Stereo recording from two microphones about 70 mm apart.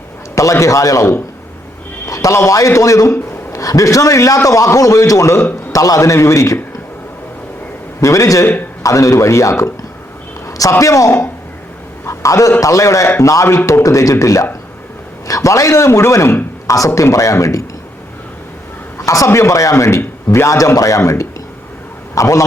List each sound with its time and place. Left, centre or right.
0.3 s a man's voice: left
8.0 s a man's voice: left
18.9 s a man's voice: left